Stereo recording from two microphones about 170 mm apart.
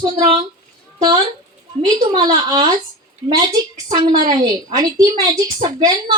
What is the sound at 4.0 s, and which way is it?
A woman's voice, 25° right (ahead or behind).